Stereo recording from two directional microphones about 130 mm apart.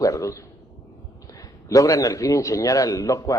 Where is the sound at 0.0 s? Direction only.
25° left (ahead or behind).